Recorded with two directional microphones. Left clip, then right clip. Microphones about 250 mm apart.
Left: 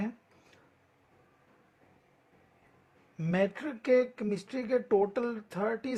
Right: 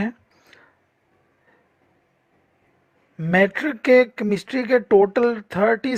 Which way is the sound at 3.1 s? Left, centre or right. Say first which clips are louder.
Right 12 dB; right.